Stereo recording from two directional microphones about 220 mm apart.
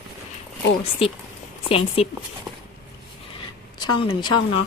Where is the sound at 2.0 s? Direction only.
25° left (ahead or behind).